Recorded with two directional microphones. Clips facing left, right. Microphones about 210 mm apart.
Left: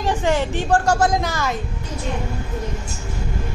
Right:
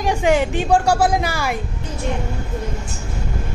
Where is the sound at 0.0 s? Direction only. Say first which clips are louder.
Right 3 dB; 10° right (ahead or behind).